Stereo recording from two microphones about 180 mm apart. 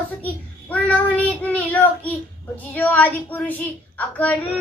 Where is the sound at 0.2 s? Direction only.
10° left (ahead or behind).